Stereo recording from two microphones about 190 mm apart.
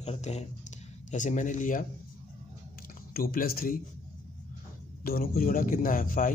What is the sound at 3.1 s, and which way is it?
Speech, 50° left (ahead or behind).